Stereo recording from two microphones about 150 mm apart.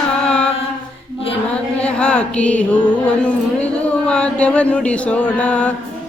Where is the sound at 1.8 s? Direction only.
5° left (ahead or behind).